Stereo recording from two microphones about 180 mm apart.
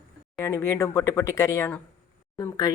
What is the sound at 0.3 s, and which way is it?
Speech, 15° left (ahead or behind).